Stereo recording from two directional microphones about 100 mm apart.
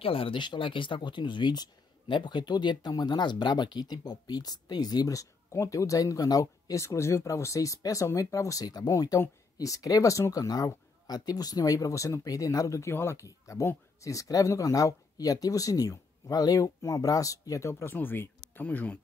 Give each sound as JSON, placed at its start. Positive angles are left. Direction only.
{"t": 0.0, "sound": "speech", "side_deg": 70}
{"t": 0.4, "sound": "speech", "side_deg": 55}